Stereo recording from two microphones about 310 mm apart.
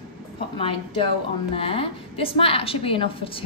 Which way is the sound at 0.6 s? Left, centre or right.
Centre.